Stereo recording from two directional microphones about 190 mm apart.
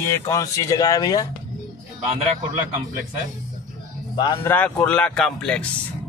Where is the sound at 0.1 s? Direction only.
15° left (ahead or behind).